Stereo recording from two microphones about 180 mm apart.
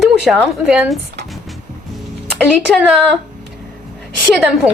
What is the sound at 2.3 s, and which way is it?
Speech, centre (ahead or behind).